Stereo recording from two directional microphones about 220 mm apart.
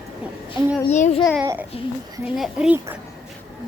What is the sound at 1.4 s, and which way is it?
Speech, 10° right (ahead or behind).